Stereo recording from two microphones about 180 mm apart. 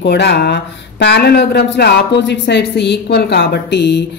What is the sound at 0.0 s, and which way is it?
Speech, 65° left (ahead or behind).